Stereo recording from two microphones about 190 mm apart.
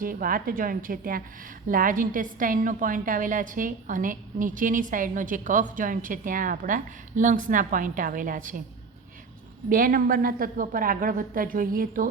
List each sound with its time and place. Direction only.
0.0 s a woman's voice: 50° right (ahead or behind)
9.6 s a woman's voice: 45° right (ahead or behind)